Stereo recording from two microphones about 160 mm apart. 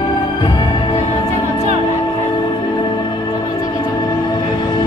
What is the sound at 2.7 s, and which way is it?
Music, 25° left (ahead or behind).